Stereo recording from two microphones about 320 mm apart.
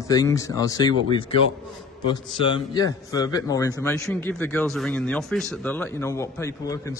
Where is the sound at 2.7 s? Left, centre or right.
Centre.